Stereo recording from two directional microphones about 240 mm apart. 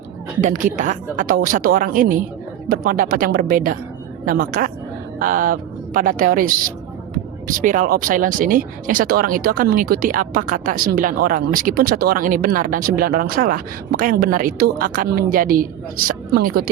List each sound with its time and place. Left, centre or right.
0.4 s speech: right